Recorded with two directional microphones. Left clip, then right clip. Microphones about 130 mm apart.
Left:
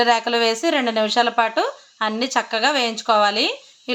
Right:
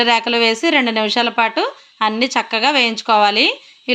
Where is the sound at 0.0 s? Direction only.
15° right (ahead or behind).